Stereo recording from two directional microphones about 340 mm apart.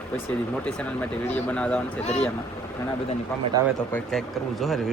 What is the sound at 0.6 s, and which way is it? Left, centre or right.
Speech, centre.